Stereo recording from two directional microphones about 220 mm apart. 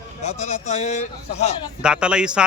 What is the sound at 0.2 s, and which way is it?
A man's voice, 30° left (ahead or behind).